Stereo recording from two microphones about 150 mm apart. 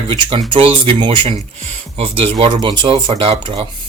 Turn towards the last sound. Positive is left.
turn(degrees=-35)  # may be behind; listen again after turning